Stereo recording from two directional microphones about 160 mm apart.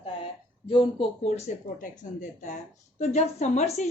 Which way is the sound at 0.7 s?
35° left (ahead or behind).